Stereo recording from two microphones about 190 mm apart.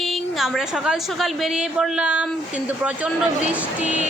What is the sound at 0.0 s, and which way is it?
A woman's voice, centre (ahead or behind).